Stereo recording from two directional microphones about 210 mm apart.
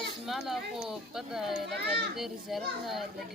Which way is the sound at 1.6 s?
50° right (ahead or behind).